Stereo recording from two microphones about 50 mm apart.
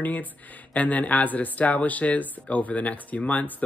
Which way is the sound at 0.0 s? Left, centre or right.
Left.